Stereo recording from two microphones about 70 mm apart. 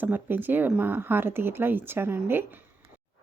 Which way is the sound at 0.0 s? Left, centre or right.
Right.